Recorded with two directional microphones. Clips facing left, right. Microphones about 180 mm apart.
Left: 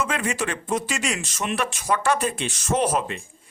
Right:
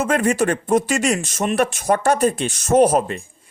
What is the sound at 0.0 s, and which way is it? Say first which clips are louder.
Speech: right 8 dB; 45° right (ahead or behind).